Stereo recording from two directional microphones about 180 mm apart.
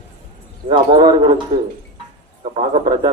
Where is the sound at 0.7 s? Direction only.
25° right (ahead or behind).